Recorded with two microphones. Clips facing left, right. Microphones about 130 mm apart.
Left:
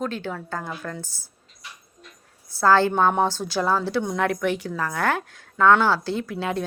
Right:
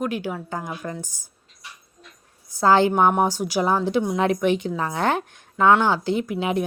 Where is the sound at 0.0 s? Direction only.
10° right (ahead or behind).